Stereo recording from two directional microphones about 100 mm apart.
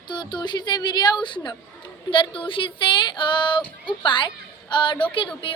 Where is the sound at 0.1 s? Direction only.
50° left (ahead or behind).